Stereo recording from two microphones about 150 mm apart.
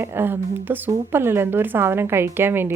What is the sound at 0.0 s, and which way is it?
Speech, 15° right (ahead or behind).